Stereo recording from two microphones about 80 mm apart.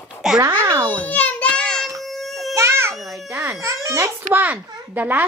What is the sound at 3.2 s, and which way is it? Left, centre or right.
Speech, right.